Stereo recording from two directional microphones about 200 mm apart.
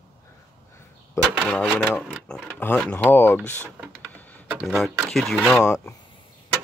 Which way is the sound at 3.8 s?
Centre (ahead or behind).